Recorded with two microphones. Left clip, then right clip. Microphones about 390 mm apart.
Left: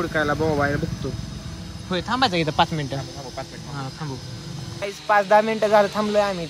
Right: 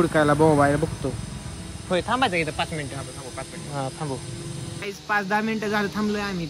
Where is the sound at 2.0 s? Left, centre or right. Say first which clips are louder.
Left 3 dB; centre.